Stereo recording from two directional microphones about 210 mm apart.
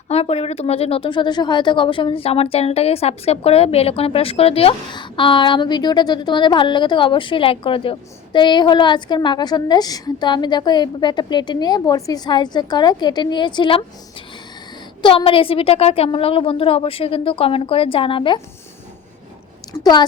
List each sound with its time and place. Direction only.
0.1 s a woman's voice: 30° left (ahead or behind)
15.0 s a woman's voice: 25° left (ahead or behind)
19.7 s a woman's voice: 20° left (ahead or behind)